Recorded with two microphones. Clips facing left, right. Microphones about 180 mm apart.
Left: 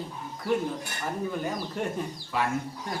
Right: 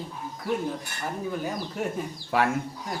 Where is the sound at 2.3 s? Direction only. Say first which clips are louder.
Right 5 dB; 60° right (ahead or behind).